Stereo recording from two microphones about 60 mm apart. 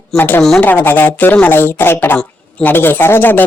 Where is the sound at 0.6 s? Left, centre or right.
Left.